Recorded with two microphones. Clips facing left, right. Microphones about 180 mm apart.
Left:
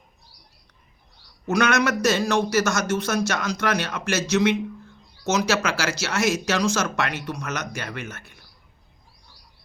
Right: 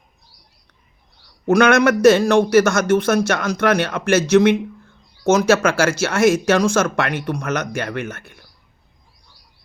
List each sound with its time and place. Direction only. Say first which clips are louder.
1.5 s a man's voice: right 8 dB; 55° right (ahead or behind)